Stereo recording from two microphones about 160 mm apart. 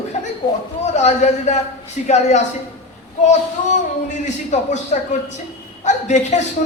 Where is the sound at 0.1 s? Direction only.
45° left (ahead or behind).